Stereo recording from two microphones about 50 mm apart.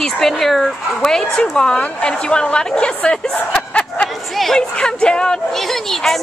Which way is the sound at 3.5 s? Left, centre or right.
Left.